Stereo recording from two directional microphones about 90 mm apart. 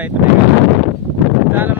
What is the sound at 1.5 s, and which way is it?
Speech, 20° right (ahead or behind).